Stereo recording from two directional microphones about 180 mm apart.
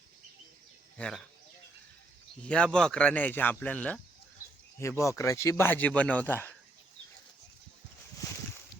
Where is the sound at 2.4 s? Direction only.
5° left (ahead or behind).